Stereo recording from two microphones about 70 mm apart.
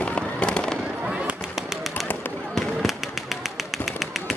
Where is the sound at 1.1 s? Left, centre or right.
Centre.